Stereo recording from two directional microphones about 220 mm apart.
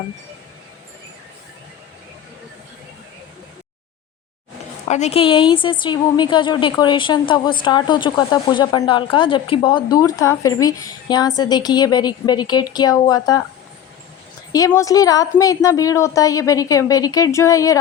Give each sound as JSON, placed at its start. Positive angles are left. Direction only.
{"t": 4.9, "sound": "speech", "side_deg": 30}
{"t": 14.5, "sound": "a woman's voice", "side_deg": 15}